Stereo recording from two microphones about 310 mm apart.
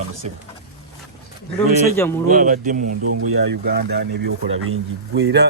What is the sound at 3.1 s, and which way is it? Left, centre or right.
Speech, right.